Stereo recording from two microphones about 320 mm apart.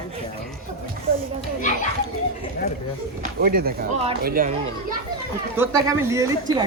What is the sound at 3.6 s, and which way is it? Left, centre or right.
Speech, right.